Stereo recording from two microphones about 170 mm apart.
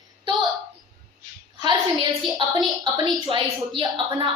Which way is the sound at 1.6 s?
25° right (ahead or behind).